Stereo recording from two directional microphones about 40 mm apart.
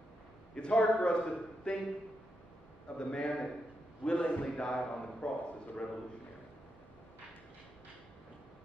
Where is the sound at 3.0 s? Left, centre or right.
Left.